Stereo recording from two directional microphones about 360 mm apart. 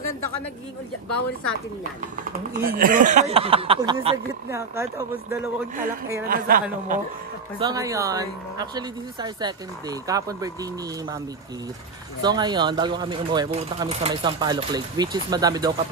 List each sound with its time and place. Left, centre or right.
1.0 s speech: left
2.6 s speech: right; by 5.4 s centre
6.2 s speech: right
7.5 s speech: centre
12.2 s speech: centre